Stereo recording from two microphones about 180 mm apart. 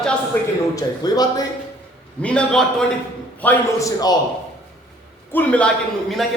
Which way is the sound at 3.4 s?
20° left (ahead or behind).